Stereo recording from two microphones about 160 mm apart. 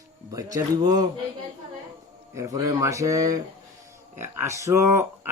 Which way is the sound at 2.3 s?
20° right (ahead or behind).